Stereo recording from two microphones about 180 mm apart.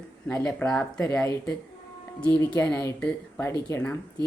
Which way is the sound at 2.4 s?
10° left (ahead or behind).